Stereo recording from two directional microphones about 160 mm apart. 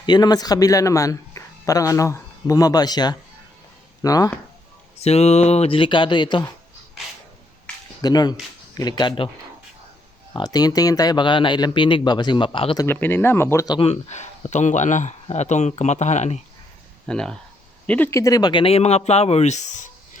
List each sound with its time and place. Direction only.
0.0 s speech: 25° left (ahead or behind)
4.9 s speech: 40° left (ahead or behind)
8.0 s speech: 25° left (ahead or behind)
10.3 s speech: 25° left (ahead or behind)
12.8 s speech: 15° left (ahead or behind)
13.7 s speech: 35° left (ahead or behind)
17.1 s speech: 5° left (ahead or behind); by 19.9 s 50° left (ahead or behind)